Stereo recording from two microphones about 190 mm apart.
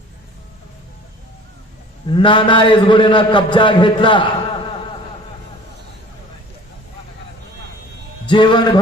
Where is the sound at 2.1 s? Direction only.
25° left (ahead or behind).